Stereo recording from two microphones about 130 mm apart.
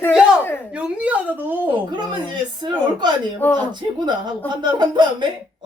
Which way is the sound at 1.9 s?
35° right (ahead or behind).